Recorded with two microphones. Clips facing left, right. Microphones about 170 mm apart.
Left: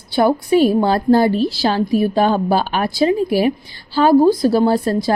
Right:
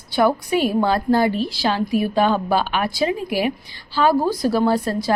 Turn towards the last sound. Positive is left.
turn(degrees=30)  # may be behind; listen again after turning